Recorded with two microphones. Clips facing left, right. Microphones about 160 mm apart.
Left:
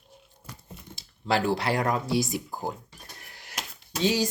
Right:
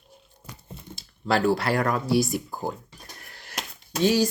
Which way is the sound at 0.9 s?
20° left (ahead or behind).